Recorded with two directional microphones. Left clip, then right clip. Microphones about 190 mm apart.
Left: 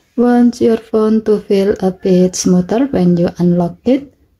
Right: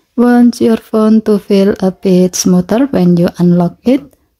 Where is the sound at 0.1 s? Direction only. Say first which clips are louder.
Right 2 dB; 25° right (ahead or behind).